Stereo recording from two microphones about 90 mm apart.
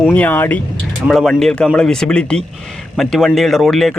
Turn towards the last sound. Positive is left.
turn(degrees=5)  # may be behind; listen again after turning